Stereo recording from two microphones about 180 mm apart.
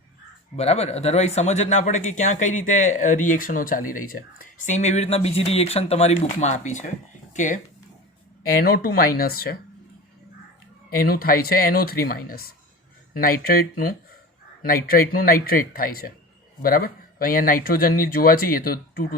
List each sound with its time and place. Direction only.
0.5 s speech: 35° left (ahead or behind)
8.5 s speech: 55° left (ahead or behind)
10.8 s speech: 55° left (ahead or behind)